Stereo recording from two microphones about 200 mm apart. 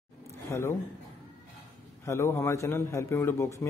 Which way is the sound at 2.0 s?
15° left (ahead or behind).